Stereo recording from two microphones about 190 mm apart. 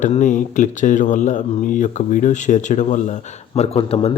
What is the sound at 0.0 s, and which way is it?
Speech, 40° left (ahead or behind).